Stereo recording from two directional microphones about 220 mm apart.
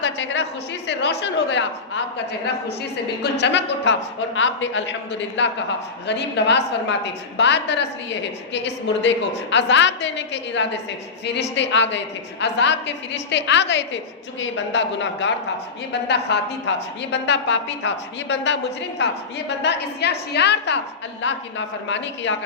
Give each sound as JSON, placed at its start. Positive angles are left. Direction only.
{"t": 0.0, "sound": "a woman's voice", "side_deg": 55}
{"t": 2.6, "sound": "a woman's voice", "side_deg": 50}